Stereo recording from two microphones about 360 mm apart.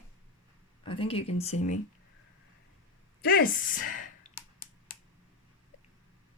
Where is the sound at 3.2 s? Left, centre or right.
Left.